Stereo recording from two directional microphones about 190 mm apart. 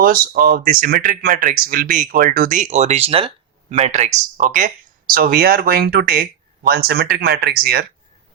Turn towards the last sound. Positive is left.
turn(degrees=-55)  # may be behind; listen again after turning